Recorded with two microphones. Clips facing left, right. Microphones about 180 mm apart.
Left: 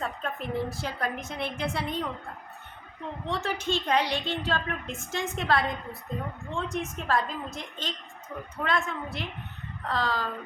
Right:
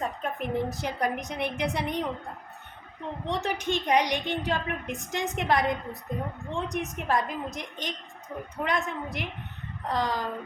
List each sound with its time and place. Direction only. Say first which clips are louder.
0.0 s a woman's voice: right 2 dB; 15° right (ahead or behind)
3.2 s a woman's voice: right 1 dB; 20° right (ahead or behind)